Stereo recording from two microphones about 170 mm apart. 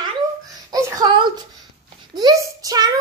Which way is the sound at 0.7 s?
20° right (ahead or behind).